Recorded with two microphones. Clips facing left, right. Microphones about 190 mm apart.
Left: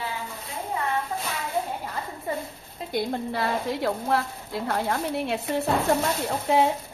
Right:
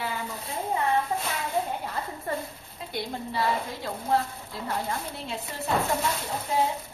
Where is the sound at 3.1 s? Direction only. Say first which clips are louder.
Left 2 dB; 65° left (ahead or behind).